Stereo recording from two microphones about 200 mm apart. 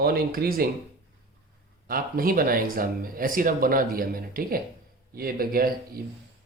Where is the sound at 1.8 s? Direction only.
45° right (ahead or behind).